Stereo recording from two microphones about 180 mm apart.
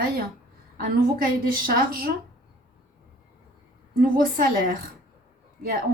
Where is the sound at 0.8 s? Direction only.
55° right (ahead or behind).